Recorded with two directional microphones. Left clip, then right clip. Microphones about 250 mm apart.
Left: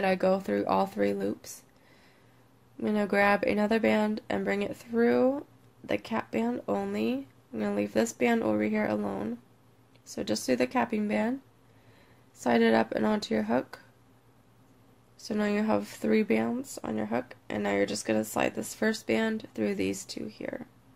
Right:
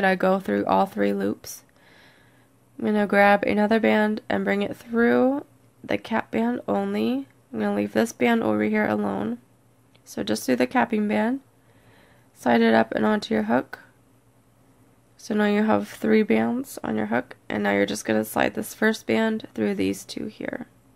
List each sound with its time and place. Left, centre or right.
0.0 s speech: right
12.4 s speech: centre
15.2 s speech: right